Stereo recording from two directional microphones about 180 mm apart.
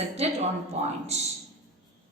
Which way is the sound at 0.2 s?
40° right (ahead or behind).